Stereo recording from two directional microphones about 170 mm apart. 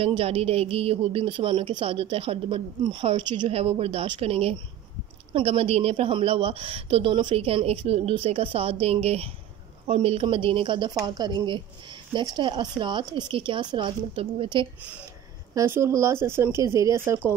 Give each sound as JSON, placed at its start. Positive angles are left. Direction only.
{"t": 0.0, "sound": "a woman's voice", "side_deg": -35}
{"t": 15.5, "sound": "speech", "side_deg": -15}